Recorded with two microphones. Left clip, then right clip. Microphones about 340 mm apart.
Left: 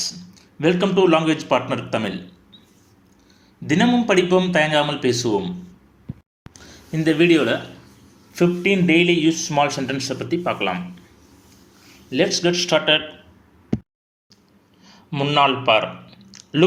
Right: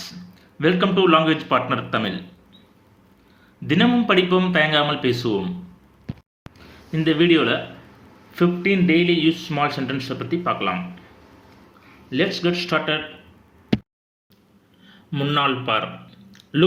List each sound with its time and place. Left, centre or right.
0.6 s a man's voice: centre
3.7 s a man's voice: centre
6.9 s speech: left
12.4 s speech: left
14.8 s a sound: centre